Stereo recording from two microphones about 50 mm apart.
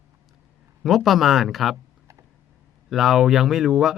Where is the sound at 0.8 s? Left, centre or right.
Centre.